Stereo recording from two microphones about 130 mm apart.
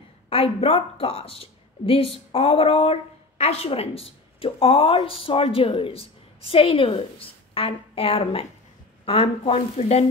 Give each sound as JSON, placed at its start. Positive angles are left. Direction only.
{"t": 0.3, "sound": "a woman's voice", "side_deg": 50}